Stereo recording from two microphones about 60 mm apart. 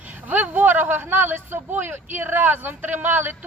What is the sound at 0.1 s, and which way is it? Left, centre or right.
Speech, right.